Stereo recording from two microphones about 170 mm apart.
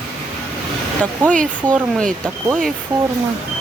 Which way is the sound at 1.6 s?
20° right (ahead or behind).